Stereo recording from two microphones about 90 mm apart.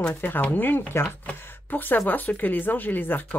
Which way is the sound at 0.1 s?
20° left (ahead or behind).